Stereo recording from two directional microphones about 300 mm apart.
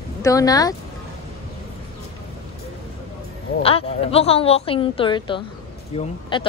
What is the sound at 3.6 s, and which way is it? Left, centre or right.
A woman's voice, centre.